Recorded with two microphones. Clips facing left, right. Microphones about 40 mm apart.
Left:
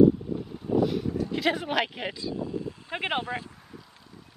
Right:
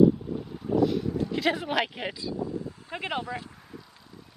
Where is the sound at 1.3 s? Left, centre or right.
Centre.